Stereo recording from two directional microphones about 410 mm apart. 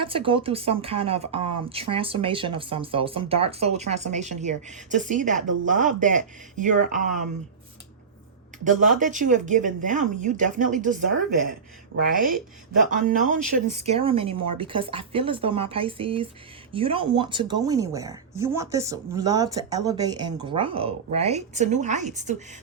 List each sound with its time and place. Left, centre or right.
0.0 s speech: centre
8.6 s speech: centre